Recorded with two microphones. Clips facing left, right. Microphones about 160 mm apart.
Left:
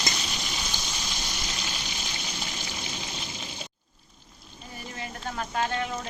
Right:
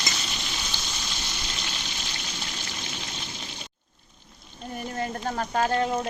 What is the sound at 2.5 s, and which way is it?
Rain, 10° left (ahead or behind).